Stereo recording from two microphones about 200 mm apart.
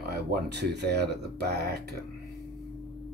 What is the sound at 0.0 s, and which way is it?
Speech, 55° right (ahead or behind).